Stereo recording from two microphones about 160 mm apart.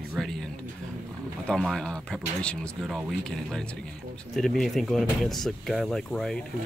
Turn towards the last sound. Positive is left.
turn(degrees=5)  # may be behind; listen again after turning